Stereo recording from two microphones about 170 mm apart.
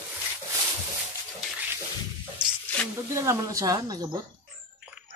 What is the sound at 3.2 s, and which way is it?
Speech, 20° right (ahead or behind).